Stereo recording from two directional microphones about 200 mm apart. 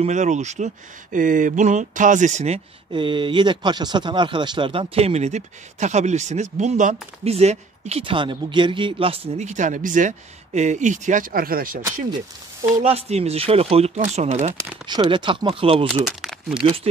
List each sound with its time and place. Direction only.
0.0 s speech: 35° right (ahead or behind)
12.8 s speech: 30° right (ahead or behind)
14.9 s speech: 25° right (ahead or behind)
16.1 s speech: centre (ahead or behind)